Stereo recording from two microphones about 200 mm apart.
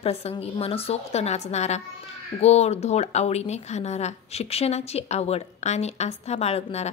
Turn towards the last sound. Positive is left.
turn(degrees=30)  # may be behind; listen again after turning